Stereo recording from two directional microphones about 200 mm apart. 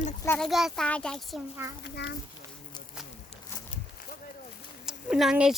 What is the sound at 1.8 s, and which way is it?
Speech, 55° left (ahead or behind).